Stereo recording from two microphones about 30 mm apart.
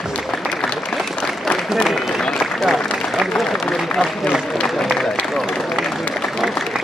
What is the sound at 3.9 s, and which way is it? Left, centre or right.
Speech, centre.